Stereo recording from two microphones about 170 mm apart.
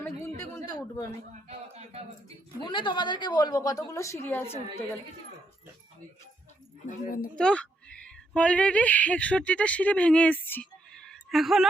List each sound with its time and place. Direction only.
1.3 s a sound: 40° right (ahead or behind)
2.6 s a woman's voice: 30° left (ahead or behind); by 4.9 s 10° left (ahead or behind)
6.8 s a woman's voice: 50° left (ahead or behind)
7.3 s speech: 5° left (ahead or behind)